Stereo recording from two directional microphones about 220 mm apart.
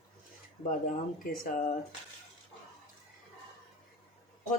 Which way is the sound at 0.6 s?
35° left (ahead or behind).